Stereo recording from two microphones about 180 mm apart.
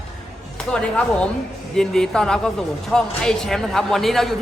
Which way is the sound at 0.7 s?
5° left (ahead or behind).